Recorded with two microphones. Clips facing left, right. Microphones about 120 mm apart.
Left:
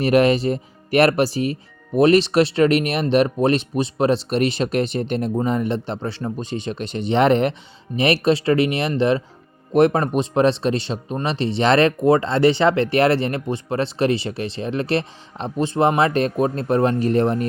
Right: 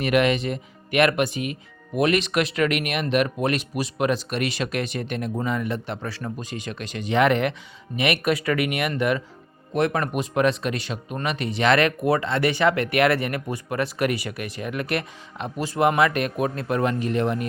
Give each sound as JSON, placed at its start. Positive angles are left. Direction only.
{"t": 0.0, "sound": "speech", "side_deg": 35}